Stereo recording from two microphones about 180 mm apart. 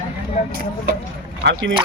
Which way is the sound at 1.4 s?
80° right.